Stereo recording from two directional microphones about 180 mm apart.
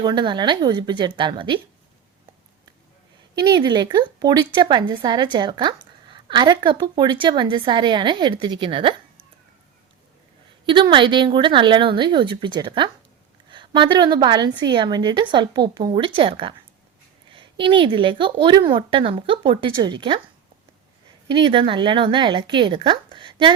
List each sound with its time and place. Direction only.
0.0 s a woman's voice: 25° right (ahead or behind)
3.3 s a woman's voice: 25° right (ahead or behind)
10.7 s a woman's voice: 25° right (ahead or behind)
21.2 s a woman's voice: 25° right (ahead or behind)